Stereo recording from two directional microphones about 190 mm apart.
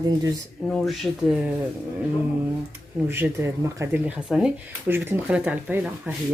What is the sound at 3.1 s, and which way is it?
Speech, 10° right (ahead or behind).